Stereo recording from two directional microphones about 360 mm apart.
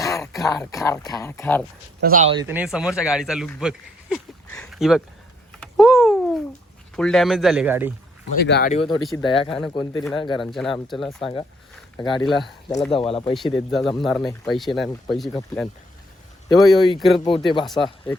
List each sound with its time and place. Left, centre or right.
0.0 s speech: centre
2.0 s a man's voice: right; by 5.0 s centre
5.5 s a sound: centre
6.9 s a man's voice: centre
8.4 s speech: left
10.3 s a man's voice: centre
11.2 s speech: centre
11.9 s a man's voice: centre
12.6 s speech: centre
13.3 s a man's voice: centre
17.2 s speech: centre